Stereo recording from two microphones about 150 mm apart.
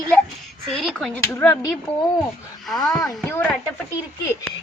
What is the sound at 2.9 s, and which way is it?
Speech, 25° left (ahead or behind).